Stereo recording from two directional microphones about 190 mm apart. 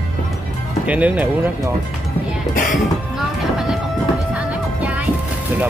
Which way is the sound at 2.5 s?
45° left (ahead or behind).